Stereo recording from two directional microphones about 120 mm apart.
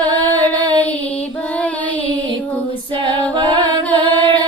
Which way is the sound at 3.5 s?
40° right (ahead or behind).